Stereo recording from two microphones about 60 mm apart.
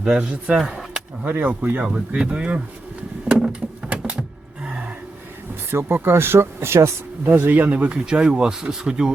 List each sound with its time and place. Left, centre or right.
0.0 s speech: centre
0.6 s a sound: centre
1.2 s speech: right
1.8 s speech: centre
3.2 s a sound: right
4.6 s gasp: centre
5.7 s speech: right
7.3 s speech: right; by 9.1 s centre